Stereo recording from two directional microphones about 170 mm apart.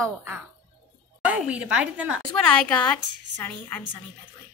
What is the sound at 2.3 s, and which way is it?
A woman's voice, 5° left (ahead or behind).